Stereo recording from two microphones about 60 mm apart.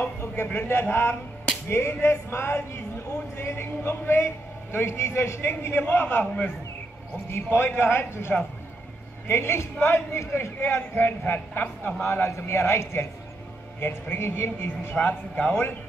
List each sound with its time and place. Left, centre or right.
0.4 s a man's voice: left
1.7 s speech: left
4.7 s speech: left
5.5 s a man's voice: left
7.2 s a man's voice: left
15.0 s a man's voice: left